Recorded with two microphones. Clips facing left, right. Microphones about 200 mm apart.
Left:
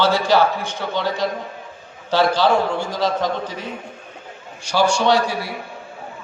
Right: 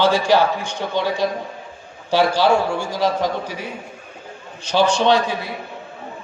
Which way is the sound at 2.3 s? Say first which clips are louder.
Right 1 dB; 10° right (ahead or behind).